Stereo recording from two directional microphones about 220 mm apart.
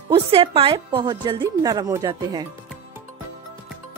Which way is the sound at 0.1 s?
25° right (ahead or behind).